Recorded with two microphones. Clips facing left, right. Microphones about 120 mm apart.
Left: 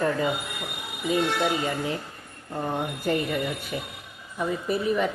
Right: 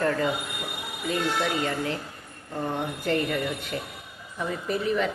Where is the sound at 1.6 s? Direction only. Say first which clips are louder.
Even; 15° left (ahead or behind).